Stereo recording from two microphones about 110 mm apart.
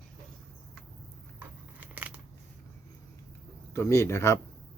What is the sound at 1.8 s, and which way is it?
Scissors, 15° right (ahead or behind).